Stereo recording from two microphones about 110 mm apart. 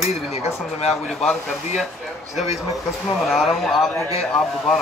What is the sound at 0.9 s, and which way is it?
Speech, centre (ahead or behind).